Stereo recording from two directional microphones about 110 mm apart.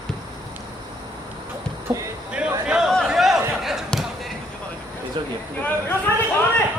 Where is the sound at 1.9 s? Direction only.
20° right (ahead or behind).